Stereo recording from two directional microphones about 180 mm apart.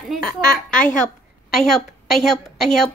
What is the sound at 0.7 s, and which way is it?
Speech, 50° left (ahead or behind).